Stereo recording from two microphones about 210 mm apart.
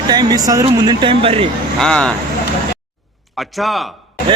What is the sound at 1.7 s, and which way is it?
Speech, 5° left (ahead or behind).